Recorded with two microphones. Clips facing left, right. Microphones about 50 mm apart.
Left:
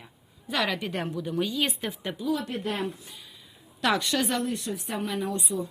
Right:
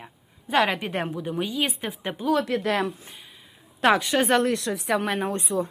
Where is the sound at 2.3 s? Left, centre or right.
Right.